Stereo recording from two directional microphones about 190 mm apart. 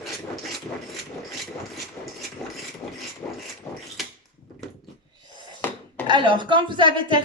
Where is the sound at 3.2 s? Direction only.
15° left (ahead or behind).